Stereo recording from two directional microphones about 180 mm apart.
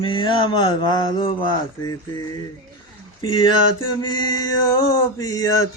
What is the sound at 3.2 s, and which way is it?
Speech, 25° left (ahead or behind).